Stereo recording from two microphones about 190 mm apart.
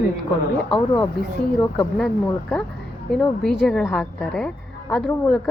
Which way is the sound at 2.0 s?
5° left (ahead or behind).